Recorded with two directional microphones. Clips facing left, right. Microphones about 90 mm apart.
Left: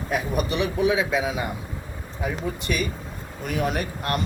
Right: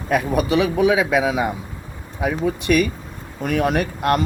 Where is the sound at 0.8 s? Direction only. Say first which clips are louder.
Right 2 dB; 70° right (ahead or behind).